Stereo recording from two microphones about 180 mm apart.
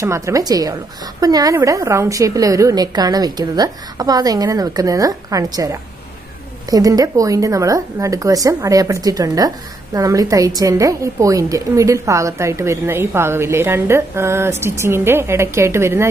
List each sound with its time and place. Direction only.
0.0 s a woman's voice: 15° right (ahead or behind)